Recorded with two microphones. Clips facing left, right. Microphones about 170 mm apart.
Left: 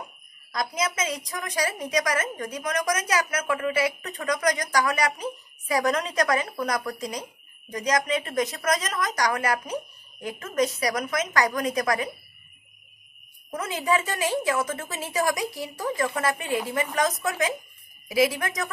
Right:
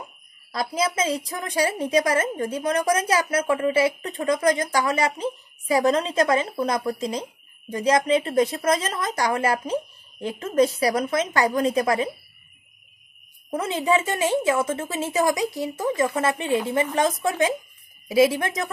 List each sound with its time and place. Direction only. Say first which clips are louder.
0.5 s a woman's voice: right 3 dB; 30° right (ahead or behind)
13.5 s a woman's voice: right 4 dB; 25° right (ahead or behind)